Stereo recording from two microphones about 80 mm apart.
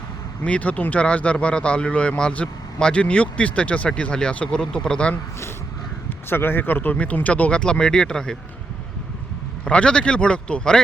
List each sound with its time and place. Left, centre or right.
0.4 s speech: centre
6.1 s speech: left; by 8.4 s centre
9.6 s speech: centre